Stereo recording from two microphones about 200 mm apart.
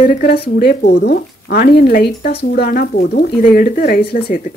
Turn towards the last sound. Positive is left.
turn(degrees=50)  # may be behind; listen again after turning